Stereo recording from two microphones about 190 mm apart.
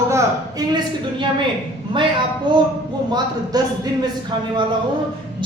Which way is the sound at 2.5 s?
25° right (ahead or behind).